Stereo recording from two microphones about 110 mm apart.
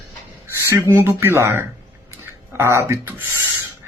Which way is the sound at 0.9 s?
20° right (ahead or behind).